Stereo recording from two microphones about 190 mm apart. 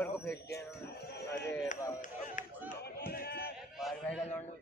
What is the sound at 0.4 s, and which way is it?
Speech, 60° left (ahead or behind).